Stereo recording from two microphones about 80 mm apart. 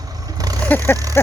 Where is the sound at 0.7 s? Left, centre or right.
Left.